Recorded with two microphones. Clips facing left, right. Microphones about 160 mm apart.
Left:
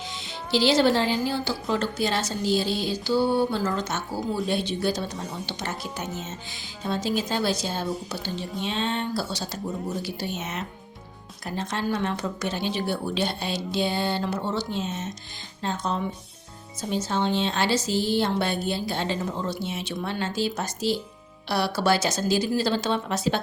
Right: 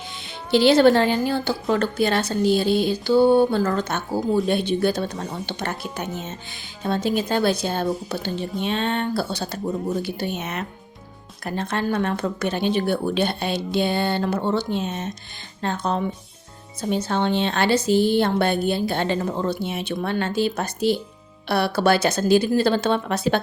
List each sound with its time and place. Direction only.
0.5 s a woman's voice: 55° right (ahead or behind)